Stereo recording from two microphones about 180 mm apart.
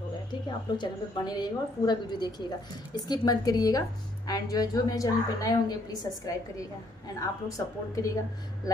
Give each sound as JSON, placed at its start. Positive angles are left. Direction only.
{"t": 0.3, "sound": "a woman's voice", "side_deg": 25}